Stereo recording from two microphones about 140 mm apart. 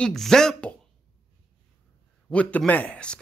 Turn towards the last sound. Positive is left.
turn(degrees=10)  # may be behind; listen again after turning